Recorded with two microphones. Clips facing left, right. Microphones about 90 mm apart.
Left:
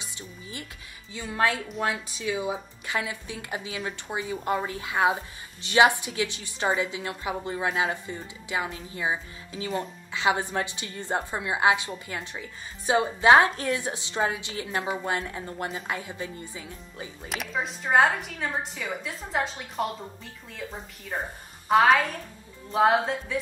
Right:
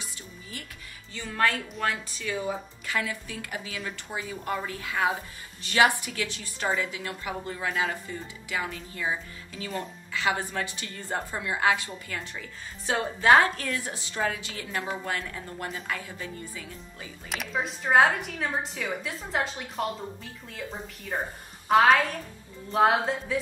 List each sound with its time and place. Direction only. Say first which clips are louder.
0.0 s music: left 2 dB; 20° left (ahead or behind)
1.1 s a woman's voice: left 1 dB; 15° left (ahead or behind)
2.9 s a woman's voice: even; 20° left (ahead or behind)
17.3 s a woman's voice: even; centre (ahead or behind)
21.6 s a woman's voice: even; centre (ahead or behind)